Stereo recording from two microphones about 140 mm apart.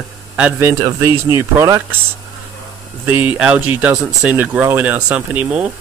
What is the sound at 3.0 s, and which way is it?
Speech, 10° right (ahead or behind).